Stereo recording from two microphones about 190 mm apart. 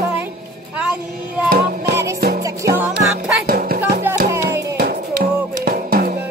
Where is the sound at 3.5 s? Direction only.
50° right (ahead or behind).